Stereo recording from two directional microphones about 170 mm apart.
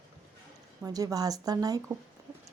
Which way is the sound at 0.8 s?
20° right (ahead or behind).